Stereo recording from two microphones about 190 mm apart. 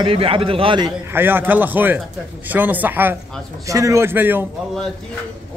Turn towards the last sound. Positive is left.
turn(degrees=-10)  # may be behind; listen again after turning